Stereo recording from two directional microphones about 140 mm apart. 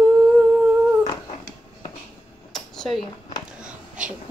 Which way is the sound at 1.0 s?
30° left (ahead or behind).